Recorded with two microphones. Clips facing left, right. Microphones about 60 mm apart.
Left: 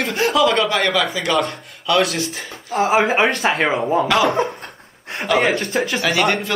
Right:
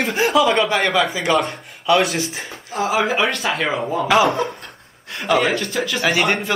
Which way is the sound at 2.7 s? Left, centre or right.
Left.